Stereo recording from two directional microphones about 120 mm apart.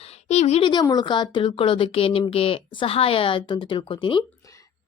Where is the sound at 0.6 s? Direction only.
40° left (ahead or behind).